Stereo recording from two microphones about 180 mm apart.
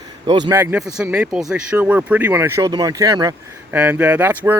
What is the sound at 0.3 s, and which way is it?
Speech, 25° right (ahead or behind).